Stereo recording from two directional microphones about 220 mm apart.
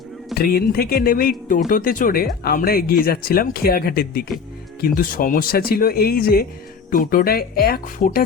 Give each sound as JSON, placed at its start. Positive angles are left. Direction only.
{"t": 0.3, "sound": "speech", "side_deg": 45}